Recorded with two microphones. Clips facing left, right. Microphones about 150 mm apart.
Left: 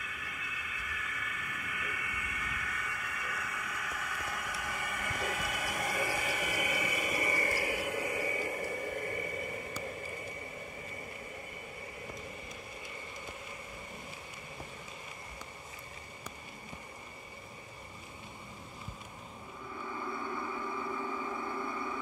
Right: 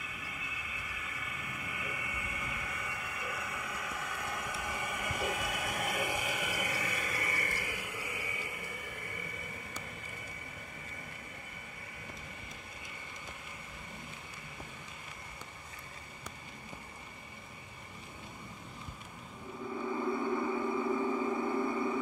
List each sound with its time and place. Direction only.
0.1 s vehicle: 25° right (ahead or behind); by 6.5 s 5° right (ahead or behind)
6.5 s a sound: 10° left (ahead or behind); by 9.8 s 35° left (ahead or behind)
19.8 s vehicle: 15° right (ahead or behind)